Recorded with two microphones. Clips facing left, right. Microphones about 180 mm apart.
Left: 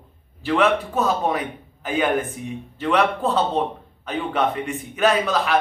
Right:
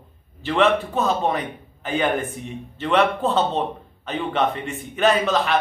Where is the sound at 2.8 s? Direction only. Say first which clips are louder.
Right 1 dB; 5° left (ahead or behind).